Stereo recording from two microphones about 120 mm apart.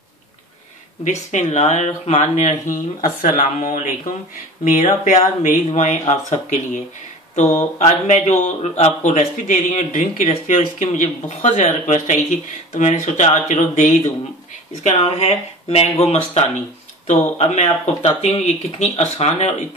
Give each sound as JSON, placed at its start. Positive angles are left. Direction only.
{"t": 1.0, "sound": "speech", "side_deg": 80}
{"t": 10.8, "sound": "speech", "side_deg": 75}
{"t": 14.8, "sound": "speech", "side_deg": 60}